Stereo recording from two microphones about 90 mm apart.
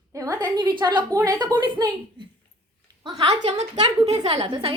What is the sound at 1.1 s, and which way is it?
Speech, 40° right (ahead or behind).